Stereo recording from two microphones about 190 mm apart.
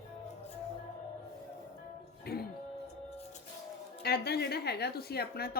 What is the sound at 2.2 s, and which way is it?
Music, 55° left (ahead or behind).